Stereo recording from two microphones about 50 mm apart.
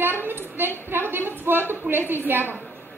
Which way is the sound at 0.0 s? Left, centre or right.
Right.